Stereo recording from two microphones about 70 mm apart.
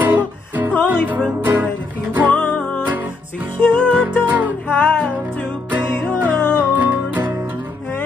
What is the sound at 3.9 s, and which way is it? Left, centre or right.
Music, right.